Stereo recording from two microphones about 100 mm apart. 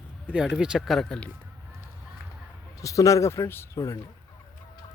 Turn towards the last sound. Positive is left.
turn(degrees=30)  # may be behind; listen again after turning